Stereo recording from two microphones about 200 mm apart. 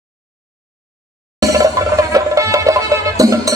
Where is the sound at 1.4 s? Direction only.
15° right (ahead or behind).